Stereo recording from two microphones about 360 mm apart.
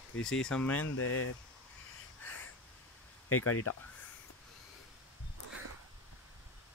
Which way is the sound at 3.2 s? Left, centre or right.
Left.